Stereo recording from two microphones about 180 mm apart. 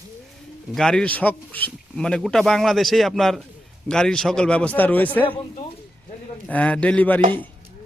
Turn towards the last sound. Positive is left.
turn(degrees=10)  # may be behind; listen again after turning